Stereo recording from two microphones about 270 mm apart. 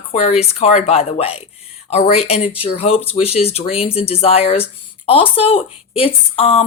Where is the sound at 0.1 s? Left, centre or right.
Left.